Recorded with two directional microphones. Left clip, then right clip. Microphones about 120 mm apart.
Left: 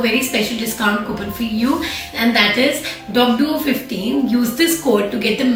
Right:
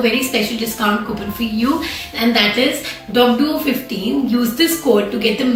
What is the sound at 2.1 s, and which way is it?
Speech, 15° right (ahead or behind).